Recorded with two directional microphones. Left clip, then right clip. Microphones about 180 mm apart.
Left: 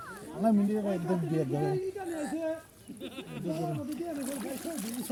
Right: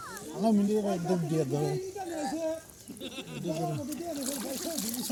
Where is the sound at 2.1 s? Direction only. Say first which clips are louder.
Right 4 dB; 35° right (ahead or behind).